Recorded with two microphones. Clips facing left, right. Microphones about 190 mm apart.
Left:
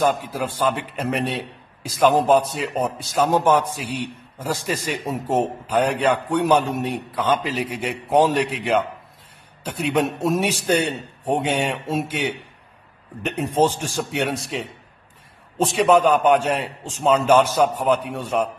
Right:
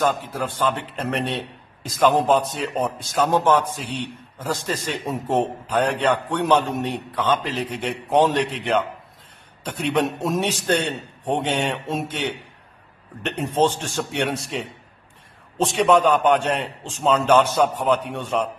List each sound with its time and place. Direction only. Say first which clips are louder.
0.0 s a man's voice: left 2 dB; 10° left (ahead or behind)